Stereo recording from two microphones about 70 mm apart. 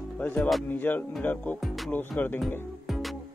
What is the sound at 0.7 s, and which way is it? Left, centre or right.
Music, left.